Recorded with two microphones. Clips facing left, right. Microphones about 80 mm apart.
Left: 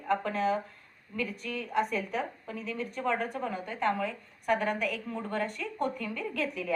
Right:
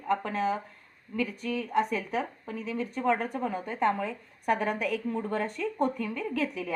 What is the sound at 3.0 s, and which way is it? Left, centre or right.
A woman's voice, right.